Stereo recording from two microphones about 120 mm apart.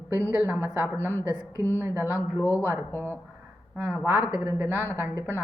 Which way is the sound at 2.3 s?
25° left (ahead or behind).